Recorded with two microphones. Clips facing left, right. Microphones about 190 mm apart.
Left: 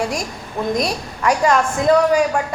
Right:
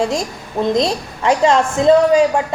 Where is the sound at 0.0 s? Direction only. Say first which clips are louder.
Right 4 dB; 25° right (ahead or behind).